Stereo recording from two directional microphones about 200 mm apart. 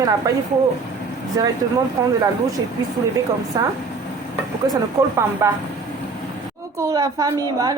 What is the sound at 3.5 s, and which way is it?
Speech, 20° right (ahead or behind).